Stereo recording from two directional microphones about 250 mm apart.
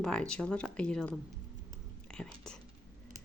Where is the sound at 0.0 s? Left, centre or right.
Centre.